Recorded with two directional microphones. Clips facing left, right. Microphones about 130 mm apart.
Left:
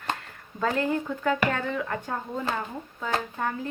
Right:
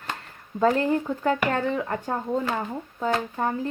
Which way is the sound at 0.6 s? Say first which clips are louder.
Right 5 dB; 30° right (ahead or behind).